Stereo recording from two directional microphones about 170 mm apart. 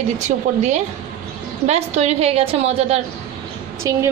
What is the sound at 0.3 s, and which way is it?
Speech, 40° right (ahead or behind).